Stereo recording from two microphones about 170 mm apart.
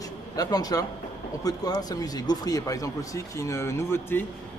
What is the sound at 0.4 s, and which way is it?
Speech, 20° left (ahead or behind).